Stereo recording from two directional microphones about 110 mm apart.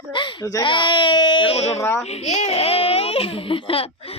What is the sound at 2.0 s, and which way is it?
A child's voice, 85° left.